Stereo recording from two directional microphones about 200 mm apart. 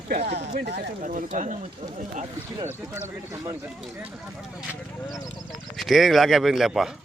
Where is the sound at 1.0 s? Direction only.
40° right (ahead or behind).